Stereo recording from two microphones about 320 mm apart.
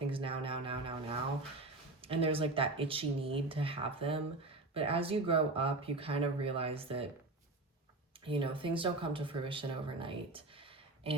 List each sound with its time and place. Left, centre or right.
0.1 s speech: centre
2.0 s speech: centre
8.2 s speech: centre